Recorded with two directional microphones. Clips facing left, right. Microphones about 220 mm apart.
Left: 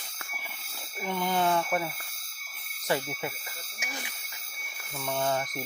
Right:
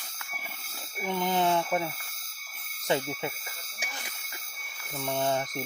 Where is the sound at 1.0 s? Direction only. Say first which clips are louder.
Right 1 dB; 15° right (ahead or behind).